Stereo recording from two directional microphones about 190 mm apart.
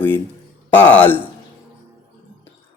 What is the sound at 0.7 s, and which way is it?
Speech, 10° left (ahead or behind).